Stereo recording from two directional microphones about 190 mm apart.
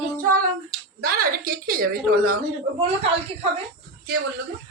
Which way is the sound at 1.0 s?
50° right (ahead or behind).